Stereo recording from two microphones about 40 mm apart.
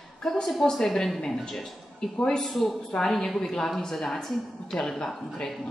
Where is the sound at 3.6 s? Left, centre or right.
Centre.